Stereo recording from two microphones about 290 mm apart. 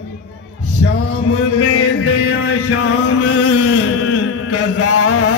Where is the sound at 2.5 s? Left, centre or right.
Left.